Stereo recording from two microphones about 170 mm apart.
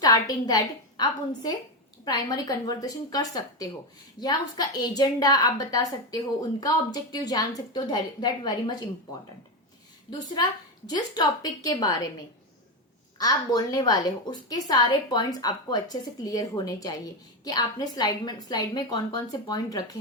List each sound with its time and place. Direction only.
0.0 s a woman's voice: 20° left (ahead or behind)
10.8 s a woman's voice: 25° left (ahead or behind)
13.1 s a woman's voice: 20° left (ahead or behind)